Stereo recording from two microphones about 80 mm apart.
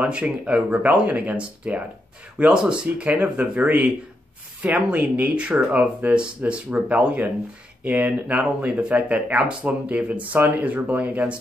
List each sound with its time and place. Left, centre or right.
0.0 s speech: centre